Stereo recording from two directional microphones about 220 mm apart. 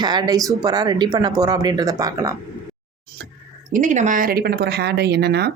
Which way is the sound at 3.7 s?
35° right (ahead or behind).